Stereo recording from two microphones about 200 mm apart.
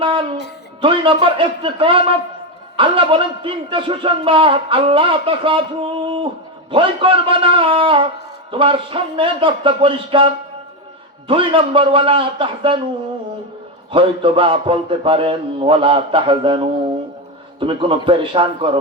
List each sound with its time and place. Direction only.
0.0 s music: 25° right (ahead or behind)
0.8 s a man's voice: 25° right (ahead or behind)
13.9 s a man's voice: 25° right (ahead or behind)